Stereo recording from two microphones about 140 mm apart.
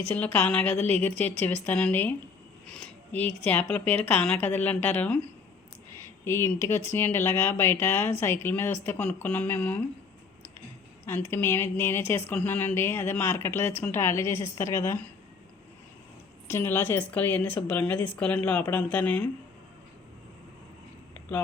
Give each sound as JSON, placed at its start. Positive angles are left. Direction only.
{"t": 0.3, "sound": "speech", "side_deg": 10}
{"t": 6.2, "sound": "speech", "side_deg": 20}
{"t": 11.0, "sound": "speech", "side_deg": 15}
{"t": 16.5, "sound": "speech", "side_deg": 15}